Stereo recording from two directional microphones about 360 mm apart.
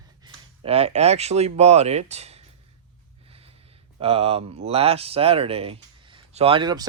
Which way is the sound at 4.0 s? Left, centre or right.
Centre.